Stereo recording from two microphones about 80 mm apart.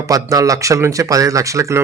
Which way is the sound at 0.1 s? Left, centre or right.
Right.